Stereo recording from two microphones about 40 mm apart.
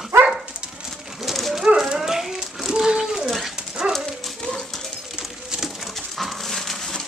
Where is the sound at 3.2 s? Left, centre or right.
Centre.